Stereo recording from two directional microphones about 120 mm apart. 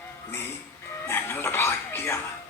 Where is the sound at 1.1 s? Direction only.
20° left (ahead or behind).